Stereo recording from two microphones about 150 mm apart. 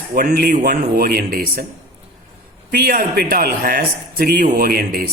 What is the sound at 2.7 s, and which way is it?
Speech, 80° right.